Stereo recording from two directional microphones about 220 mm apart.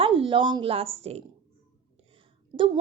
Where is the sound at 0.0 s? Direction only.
25° right (ahead or behind).